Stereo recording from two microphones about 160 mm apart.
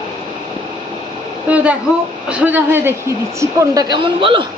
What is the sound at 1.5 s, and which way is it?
A man's voice, 10° right (ahead or behind).